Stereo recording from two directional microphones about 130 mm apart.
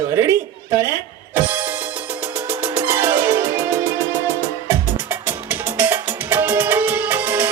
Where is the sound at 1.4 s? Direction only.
15° right (ahead or behind).